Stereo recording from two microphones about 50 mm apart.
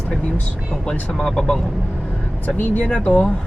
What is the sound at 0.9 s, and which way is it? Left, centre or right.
Speech, centre.